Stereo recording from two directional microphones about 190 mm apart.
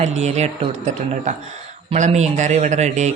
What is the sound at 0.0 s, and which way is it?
Speech, 35° right (ahead or behind).